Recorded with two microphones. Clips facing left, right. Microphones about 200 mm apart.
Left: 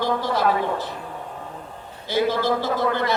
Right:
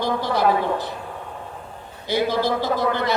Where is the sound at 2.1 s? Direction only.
15° right (ahead or behind).